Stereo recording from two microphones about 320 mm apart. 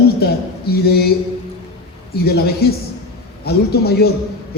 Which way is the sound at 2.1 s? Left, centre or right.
Left.